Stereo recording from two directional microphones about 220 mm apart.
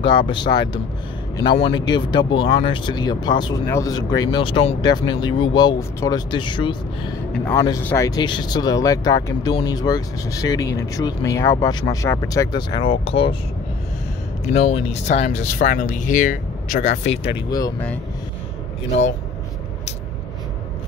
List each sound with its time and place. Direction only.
0.0 s speech: 20° left (ahead or behind)
7.3 s speech: 5° left (ahead or behind); by 13.4 s 25° left (ahead or behind)
14.4 s speech: 30° left (ahead or behind)
17.0 s speech: 55° left (ahead or behind)
17.5 s speech: 15° left (ahead or behind)